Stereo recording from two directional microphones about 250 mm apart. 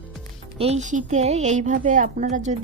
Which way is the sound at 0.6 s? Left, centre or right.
Right.